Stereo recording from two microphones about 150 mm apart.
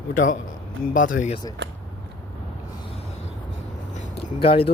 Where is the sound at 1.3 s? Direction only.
30° left (ahead or behind).